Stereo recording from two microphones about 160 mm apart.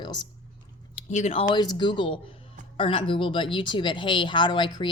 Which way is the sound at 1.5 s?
25° left (ahead or behind).